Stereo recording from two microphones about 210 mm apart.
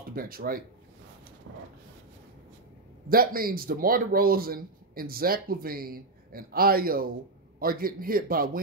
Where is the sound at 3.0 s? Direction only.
45° right (ahead or behind).